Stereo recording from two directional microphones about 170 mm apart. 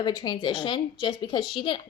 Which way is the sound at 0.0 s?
25° left (ahead or behind).